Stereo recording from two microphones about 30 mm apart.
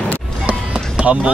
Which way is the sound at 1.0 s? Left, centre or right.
Right.